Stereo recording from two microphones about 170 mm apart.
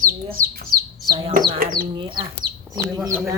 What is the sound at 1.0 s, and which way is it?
Speech, 30° right (ahead or behind).